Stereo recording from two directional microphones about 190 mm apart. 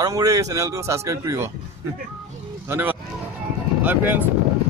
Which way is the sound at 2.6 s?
10° right (ahead or behind).